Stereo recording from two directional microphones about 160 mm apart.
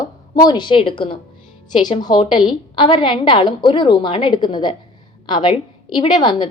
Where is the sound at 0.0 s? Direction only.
25° left (ahead or behind).